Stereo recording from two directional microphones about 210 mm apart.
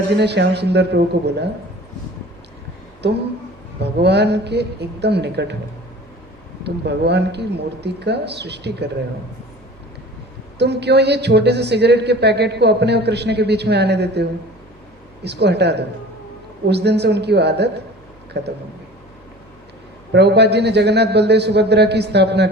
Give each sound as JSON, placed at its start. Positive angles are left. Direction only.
{"t": 0.2, "sound": "a woman's voice", "side_deg": -55}
{"t": 3.0, "sound": "a woman's voice", "side_deg": -55}
{"t": 6.7, "sound": "a woman's voice", "side_deg": -50}
{"t": 10.6, "sound": "a woman's voice", "side_deg": -55}
{"t": 20.1, "sound": "a woman's voice", "side_deg": -55}